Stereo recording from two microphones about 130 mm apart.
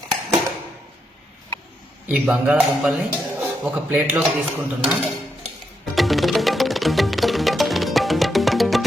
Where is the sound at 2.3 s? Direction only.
5° right (ahead or behind).